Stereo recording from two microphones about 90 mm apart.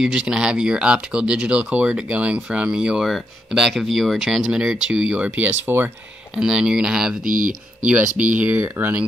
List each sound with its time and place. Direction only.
0.0 s speech: 5° right (ahead or behind)
6.3 s speech: 10° right (ahead or behind)
7.9 s speech: 20° right (ahead or behind)